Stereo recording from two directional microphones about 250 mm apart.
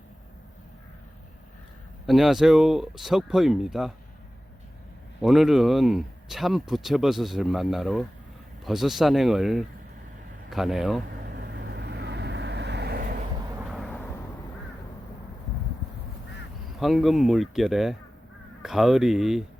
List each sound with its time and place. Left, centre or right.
2.0 s speech: centre
5.2 s speech: centre
11.3 s vehicle: right
13.7 s a sound: centre
16.7 s speech: centre